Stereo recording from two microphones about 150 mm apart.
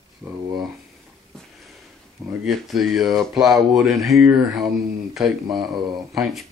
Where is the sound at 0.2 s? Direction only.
5° right (ahead or behind).